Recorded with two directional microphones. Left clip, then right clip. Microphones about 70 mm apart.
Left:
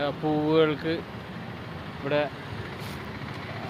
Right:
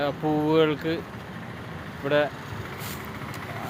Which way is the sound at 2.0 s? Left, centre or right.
Right.